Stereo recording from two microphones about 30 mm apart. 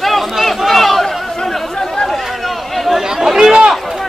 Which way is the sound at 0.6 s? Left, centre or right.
Centre.